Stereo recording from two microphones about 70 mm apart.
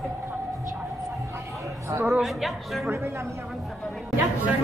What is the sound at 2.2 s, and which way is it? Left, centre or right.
Speech, centre.